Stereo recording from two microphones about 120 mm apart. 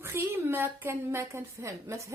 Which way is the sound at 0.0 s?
20° right (ahead or behind).